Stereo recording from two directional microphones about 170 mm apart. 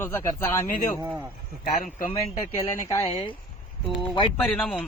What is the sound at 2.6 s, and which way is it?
Speech, 15° left (ahead or behind).